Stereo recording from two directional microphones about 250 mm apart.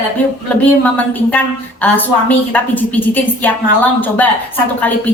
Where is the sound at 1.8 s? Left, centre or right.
Centre.